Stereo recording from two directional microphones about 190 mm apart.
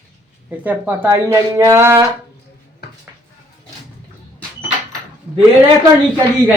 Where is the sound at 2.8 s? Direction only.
55° left (ahead or behind).